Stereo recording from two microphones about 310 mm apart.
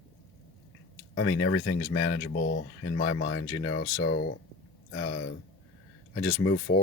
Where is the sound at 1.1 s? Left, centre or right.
Left.